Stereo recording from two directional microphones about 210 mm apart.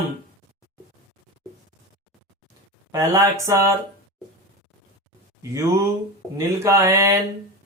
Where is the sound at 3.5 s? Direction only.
15° right (ahead or behind).